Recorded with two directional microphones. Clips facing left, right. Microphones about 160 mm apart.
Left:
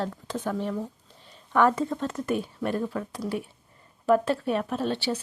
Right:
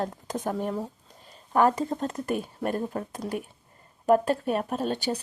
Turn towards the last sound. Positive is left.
turn(degrees=-45)  # may be behind; listen again after turning